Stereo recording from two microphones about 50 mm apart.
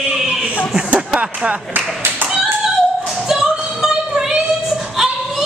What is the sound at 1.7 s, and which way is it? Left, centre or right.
Clapping, right.